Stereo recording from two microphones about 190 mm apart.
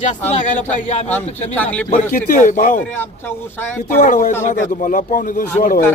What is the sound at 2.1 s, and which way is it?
Speech, 40° left (ahead or behind).